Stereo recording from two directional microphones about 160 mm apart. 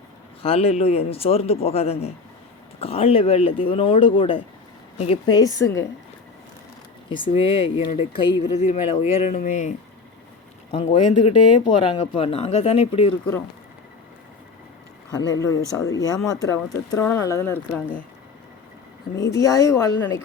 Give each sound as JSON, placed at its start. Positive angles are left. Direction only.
{"t": 0.4, "sound": "speech", "side_deg": 40}
{"t": 7.1, "sound": "speech", "side_deg": 35}
{"t": 10.7, "sound": "speech", "side_deg": 40}
{"t": 15.1, "sound": "speech", "side_deg": 20}
{"t": 19.1, "sound": "speech", "side_deg": 20}